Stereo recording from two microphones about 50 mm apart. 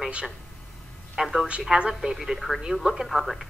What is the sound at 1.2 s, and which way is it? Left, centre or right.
Speech, centre.